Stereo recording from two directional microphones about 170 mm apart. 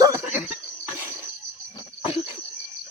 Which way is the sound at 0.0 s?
15° right (ahead or behind).